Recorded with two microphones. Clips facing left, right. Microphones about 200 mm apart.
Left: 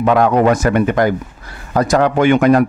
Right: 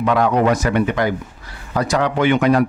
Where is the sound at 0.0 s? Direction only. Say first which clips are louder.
Left 4 dB; 50° left (ahead or behind).